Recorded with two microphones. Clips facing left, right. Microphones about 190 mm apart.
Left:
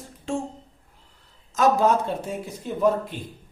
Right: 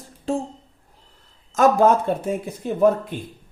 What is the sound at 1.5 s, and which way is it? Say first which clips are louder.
Speech: right 4 dB; 50° right (ahead or behind).